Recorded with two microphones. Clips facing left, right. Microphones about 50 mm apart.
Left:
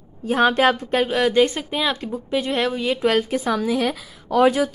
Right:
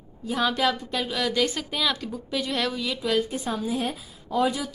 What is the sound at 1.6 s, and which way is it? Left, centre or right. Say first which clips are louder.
A woman's voice: left 4 dB; left.